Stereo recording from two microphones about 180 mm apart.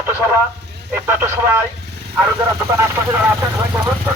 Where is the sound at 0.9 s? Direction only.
15° right (ahead or behind).